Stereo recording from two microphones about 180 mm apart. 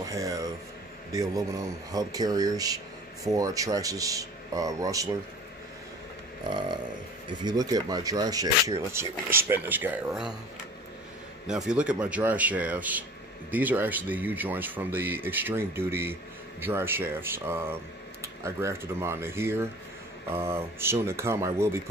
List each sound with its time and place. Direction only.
0.1 s a sound: 20° right (ahead or behind)
1.9 s speech: 20° right (ahead or behind)
7.4 s speech: 20° right (ahead or behind)
11.4 s speech: 5° right (ahead or behind)